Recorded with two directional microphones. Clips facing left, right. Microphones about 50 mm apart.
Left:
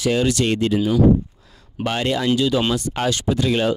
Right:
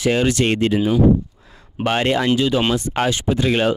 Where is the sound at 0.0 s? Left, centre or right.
Right.